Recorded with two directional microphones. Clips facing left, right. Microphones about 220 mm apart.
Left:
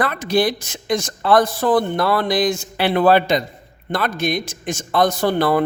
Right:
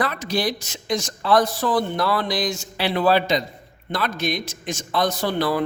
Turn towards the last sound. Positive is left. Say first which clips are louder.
# left 5 dB
turn(degrees=55)  # may be behind; listen again after turning